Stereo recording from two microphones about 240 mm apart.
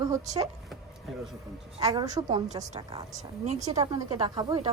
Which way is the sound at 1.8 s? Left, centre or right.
Centre.